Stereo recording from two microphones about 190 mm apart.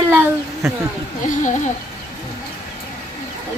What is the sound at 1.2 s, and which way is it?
Speech, 40° left (ahead or behind).